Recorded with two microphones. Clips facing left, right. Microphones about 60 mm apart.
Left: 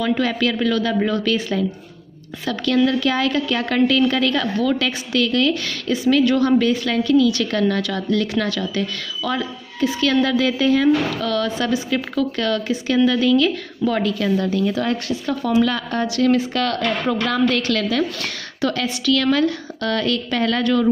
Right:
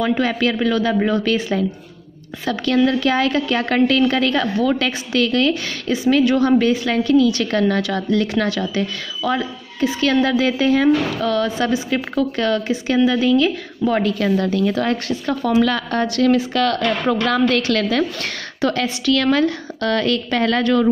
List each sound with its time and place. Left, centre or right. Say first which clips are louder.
0.2 s a woman's voice: right 1 dB; right
5.5 s a woman's voice: right 1 dB; right
14.0 s a woman's voice: right 2 dB; right
15.6 s a woman's voice: right 2 dB; right
17.6 s a woman's voice: right 2 dB; right